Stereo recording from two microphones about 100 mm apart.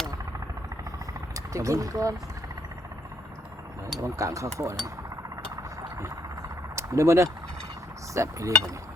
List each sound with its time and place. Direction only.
1.3 s speech: 30° right (ahead or behind)
4.0 s cutlery: 30° right (ahead or behind)
4.5 s speech: 30° right (ahead or behind)
6.7 s speech: 30° right (ahead or behind)
8.1 s cutlery: 30° right (ahead or behind)